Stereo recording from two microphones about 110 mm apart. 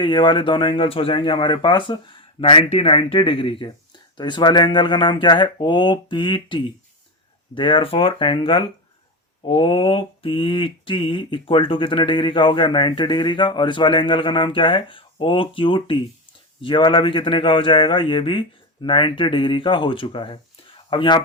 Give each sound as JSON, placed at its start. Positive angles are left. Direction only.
{"t": 0.0, "sound": "speech", "side_deg": 45}
{"t": 2.4, "sound": "speech", "side_deg": 60}